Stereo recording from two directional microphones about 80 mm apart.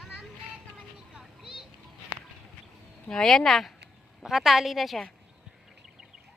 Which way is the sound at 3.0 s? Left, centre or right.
Centre.